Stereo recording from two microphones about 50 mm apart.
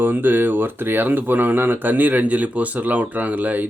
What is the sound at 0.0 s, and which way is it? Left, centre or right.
Speech, right.